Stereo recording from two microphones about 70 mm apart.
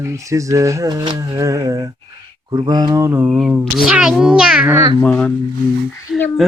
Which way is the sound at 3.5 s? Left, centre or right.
Centre.